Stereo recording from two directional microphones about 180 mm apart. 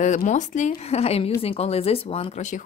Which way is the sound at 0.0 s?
45° left (ahead or behind).